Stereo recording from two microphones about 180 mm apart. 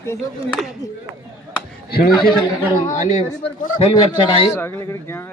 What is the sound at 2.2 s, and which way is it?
Speech, 25° left (ahead or behind).